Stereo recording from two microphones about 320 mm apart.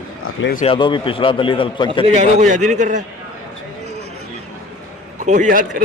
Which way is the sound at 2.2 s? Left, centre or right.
Right.